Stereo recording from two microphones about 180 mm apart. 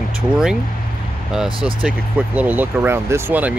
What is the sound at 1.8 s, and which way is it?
Speech, 10° right (ahead or behind).